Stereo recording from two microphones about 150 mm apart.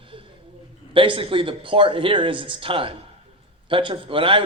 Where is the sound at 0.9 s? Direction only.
35° right (ahead or behind).